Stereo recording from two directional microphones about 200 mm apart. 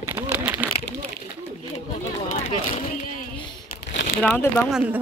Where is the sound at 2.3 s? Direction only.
35° left (ahead or behind).